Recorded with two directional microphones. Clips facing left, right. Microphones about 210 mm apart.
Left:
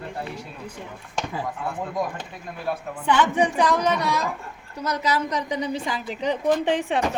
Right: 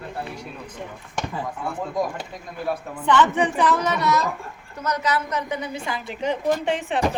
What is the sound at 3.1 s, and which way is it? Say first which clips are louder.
A woman's voice: right 1 dB; 10° left (ahead or behind).